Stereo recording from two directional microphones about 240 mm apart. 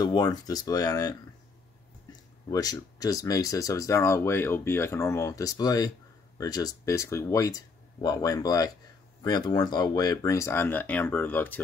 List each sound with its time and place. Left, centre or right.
0.0 s speech: centre
2.5 s speech: centre